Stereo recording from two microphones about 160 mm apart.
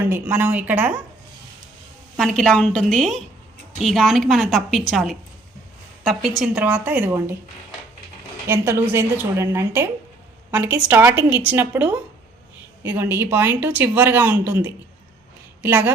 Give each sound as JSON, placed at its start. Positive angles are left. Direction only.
{"t": 0.1, "sound": "a woman's voice", "side_deg": -10}
{"t": 2.1, "sound": "a woman's voice", "side_deg": 0}
{"t": 8.4, "sound": "a woman's voice", "side_deg": -15}